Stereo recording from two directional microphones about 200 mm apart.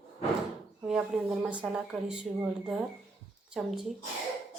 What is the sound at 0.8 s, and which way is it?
Speech, 5° right (ahead or behind).